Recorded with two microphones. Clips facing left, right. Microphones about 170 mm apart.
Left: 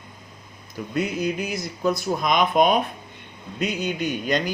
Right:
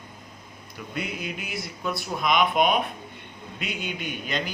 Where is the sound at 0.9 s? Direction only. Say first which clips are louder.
Left 8 dB; 40° left (ahead or behind).